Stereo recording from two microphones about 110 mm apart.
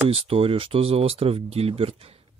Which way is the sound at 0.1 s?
60° right (ahead or behind).